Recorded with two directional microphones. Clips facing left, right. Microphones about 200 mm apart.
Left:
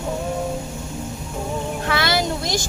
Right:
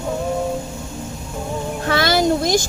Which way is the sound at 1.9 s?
45° right (ahead or behind).